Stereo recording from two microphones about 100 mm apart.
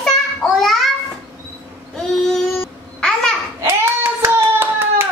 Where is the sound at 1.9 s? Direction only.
5° left (ahead or behind).